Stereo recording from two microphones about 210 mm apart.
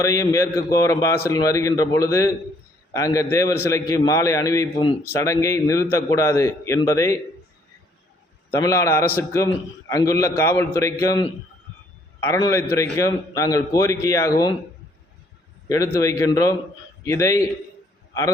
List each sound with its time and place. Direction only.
0.0 s a man's voice: 15° left (ahead or behind)
8.4 s a man's voice: 15° left (ahead or behind)
15.7 s a man's voice: 15° left (ahead or behind)